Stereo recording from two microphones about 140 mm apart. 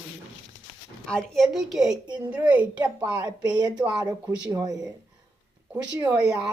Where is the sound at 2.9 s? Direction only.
25° right (ahead or behind).